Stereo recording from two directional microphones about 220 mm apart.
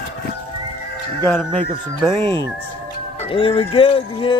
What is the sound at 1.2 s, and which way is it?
Speech, 10° left (ahead or behind).